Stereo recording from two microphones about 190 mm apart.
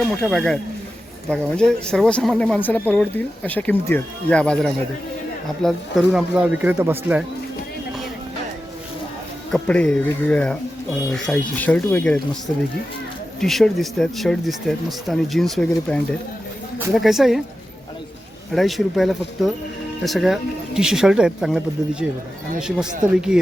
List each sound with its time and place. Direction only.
0.1 s speech: centre (ahead or behind)
9.5 s speech: 5° left (ahead or behind)
13.4 s speech: centre (ahead or behind)
18.5 s speech: centre (ahead or behind)
22.6 s speech: 5° right (ahead or behind)